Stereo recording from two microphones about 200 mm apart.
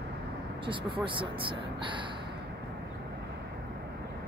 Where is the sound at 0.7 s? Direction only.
25° right (ahead or behind).